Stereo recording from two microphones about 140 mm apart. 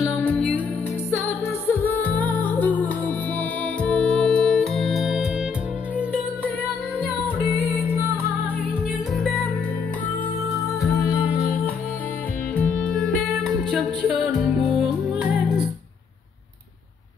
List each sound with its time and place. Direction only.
0.0 s music: 15° left (ahead or behind)
1.7 s music: 15° left (ahead or behind); by 6.5 s 10° right (ahead or behind)
9.1 s music: centre (ahead or behind)
10.5 s music: 25° left (ahead or behind)
12.5 s music: 5° left (ahead or behind)
13.7 s music: 5° right (ahead or behind)